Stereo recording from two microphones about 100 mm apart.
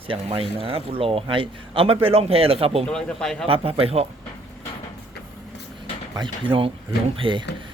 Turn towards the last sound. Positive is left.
turn(degrees=-55)  # may be behind; listen again after turning